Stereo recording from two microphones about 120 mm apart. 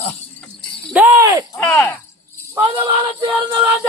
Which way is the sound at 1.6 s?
15° left (ahead or behind).